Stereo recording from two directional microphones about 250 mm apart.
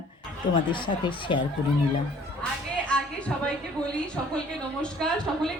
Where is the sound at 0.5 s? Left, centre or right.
Centre.